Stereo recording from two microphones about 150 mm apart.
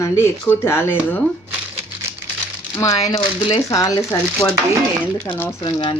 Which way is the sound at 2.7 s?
25° left (ahead or behind).